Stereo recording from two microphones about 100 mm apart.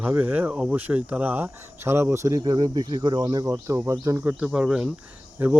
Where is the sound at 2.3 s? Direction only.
40° right (ahead or behind).